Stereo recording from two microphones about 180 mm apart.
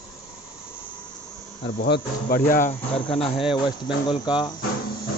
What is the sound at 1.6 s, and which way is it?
Speech, 60° left (ahead or behind).